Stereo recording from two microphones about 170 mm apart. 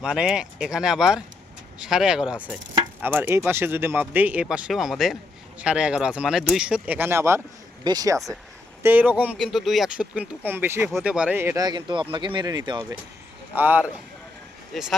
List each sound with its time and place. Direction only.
0.0 s speech: 5° right (ahead or behind); by 8.2 s 20° right (ahead or behind)
8.8 s speech: 10° right (ahead or behind); by 13.0 s 25° right (ahead or behind)
13.5 s speech: 10° right (ahead or behind)